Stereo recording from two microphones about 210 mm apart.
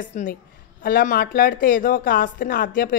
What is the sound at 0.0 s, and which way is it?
A woman's voice, 40° left (ahead or behind).